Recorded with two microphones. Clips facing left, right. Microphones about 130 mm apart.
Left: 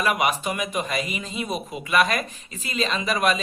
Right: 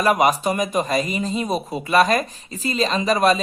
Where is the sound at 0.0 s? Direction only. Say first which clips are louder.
Right 6 dB; 40° right (ahead or behind).